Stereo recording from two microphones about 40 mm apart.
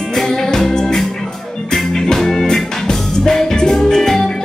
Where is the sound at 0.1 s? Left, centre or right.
Centre.